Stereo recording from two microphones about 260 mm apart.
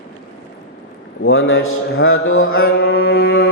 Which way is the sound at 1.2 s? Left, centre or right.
Left.